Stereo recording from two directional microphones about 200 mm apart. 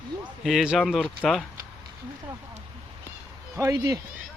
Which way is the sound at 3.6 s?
20° right (ahead or behind).